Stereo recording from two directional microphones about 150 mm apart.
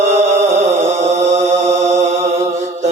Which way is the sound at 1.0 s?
50° right (ahead or behind).